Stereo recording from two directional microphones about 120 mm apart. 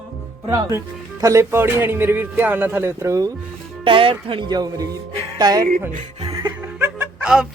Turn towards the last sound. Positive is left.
turn(degrees=-5)  # may be behind; listen again after turning